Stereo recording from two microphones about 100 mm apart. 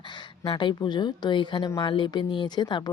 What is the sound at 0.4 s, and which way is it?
Speech, 50° left (ahead or behind).